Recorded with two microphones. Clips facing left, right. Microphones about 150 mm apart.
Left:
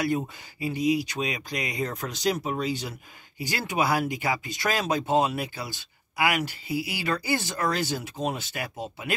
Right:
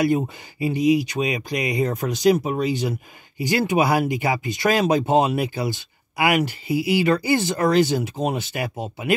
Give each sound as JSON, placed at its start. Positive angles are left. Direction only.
{"t": 0.0, "sound": "speech", "side_deg": -15}